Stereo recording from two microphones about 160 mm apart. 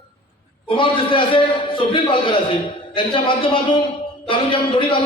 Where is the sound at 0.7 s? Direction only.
30° left (ahead or behind).